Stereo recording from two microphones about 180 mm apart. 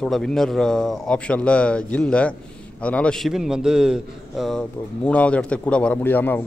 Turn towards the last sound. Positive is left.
turn(degrees=10)  # may be behind; listen again after turning